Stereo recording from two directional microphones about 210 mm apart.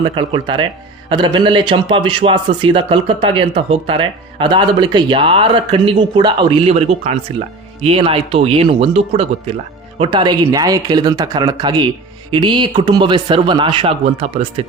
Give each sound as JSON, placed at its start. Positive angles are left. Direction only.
{"t": 0.0, "sound": "a man's voice", "side_deg": -25}